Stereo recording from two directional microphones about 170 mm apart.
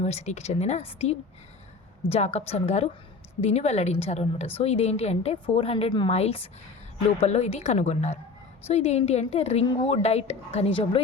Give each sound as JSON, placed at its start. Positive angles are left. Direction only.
{"t": 0.0, "sound": "a woman's voice", "side_deg": 40}